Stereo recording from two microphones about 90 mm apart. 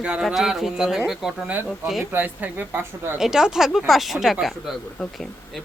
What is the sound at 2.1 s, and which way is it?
Speech, 20° right (ahead or behind).